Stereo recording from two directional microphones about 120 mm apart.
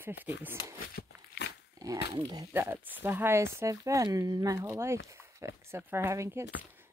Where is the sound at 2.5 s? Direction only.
15° right (ahead or behind).